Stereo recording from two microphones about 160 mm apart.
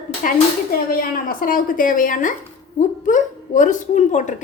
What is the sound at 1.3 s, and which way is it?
A woman's voice, 60° left (ahead or behind).